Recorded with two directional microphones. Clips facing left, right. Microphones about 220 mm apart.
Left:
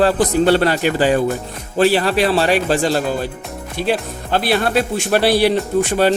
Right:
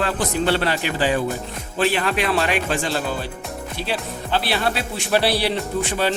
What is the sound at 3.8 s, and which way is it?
A man's voice, 50° left (ahead or behind).